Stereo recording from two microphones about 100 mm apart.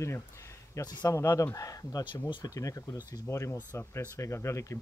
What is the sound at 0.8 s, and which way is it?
Speech, 35° left (ahead or behind).